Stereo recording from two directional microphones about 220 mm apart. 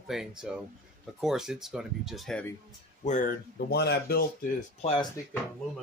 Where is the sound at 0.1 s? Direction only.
Centre (ahead or behind).